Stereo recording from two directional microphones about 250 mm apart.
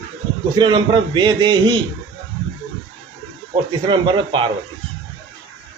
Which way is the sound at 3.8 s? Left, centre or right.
Centre.